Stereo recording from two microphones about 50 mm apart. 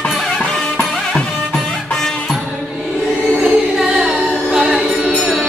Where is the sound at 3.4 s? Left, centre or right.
Centre.